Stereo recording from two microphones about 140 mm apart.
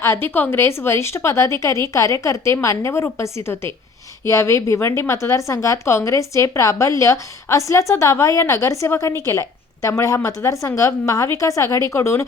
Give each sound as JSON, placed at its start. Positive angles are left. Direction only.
{"t": 0.0, "sound": "speech", "side_deg": 15}